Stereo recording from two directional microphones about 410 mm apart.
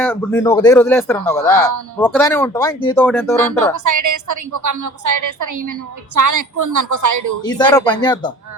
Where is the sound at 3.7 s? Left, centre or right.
Right.